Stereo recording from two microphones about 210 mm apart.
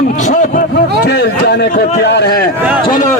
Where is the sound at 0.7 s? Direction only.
50° left (ahead or behind).